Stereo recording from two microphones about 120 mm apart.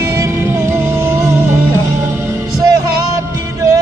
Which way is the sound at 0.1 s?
20° right (ahead or behind).